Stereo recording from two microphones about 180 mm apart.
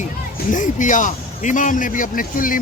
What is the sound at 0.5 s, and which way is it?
A man's voice, 45° left (ahead or behind).